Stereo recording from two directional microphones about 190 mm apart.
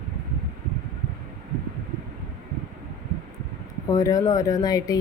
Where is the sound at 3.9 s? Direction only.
20° left (ahead or behind).